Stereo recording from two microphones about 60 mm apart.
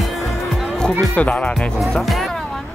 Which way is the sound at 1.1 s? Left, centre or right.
Left.